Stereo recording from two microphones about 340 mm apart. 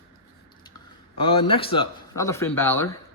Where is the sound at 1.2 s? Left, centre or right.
Centre.